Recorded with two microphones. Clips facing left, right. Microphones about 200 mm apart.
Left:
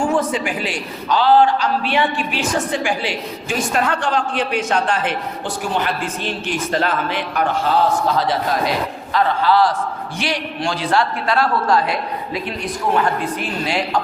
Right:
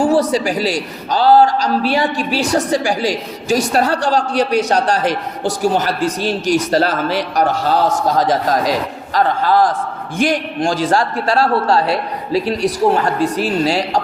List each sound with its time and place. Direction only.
0.0 s a man's voice: 35° right (ahead or behind)
11.3 s a man's voice: 30° right (ahead or behind)